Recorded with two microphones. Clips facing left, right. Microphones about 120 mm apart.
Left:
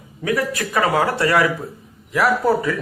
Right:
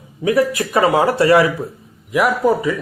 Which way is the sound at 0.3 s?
25° right (ahead or behind).